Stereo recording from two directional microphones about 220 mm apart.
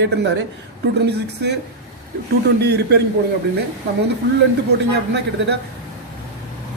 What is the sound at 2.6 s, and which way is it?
Speech, 50° right (ahead or behind).